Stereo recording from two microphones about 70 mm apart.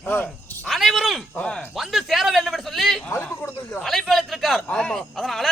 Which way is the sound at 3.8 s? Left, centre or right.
Centre.